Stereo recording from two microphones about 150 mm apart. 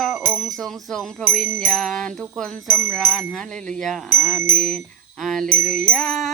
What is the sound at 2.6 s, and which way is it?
Bell, 15° right (ahead or behind).